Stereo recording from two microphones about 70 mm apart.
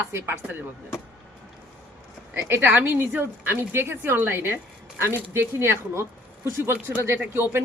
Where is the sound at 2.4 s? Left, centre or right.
Right.